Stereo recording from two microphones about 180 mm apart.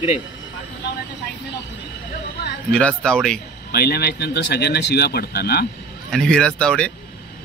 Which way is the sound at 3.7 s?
60° left (ahead or behind).